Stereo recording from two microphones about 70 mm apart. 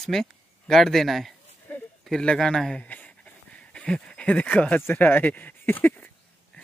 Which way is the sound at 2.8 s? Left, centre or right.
Left.